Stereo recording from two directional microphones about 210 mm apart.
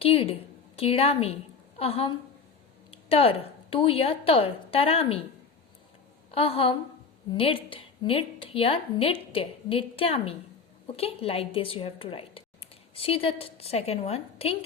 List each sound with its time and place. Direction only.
0.0 s a woman's voice: 25° left (ahead or behind)
6.3 s speech: 30° left (ahead or behind)